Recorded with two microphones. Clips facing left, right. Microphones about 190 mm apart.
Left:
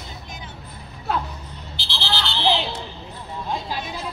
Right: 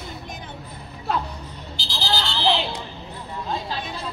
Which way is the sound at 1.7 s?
40° right (ahead or behind).